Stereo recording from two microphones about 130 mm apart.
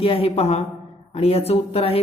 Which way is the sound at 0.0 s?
50° left (ahead or behind).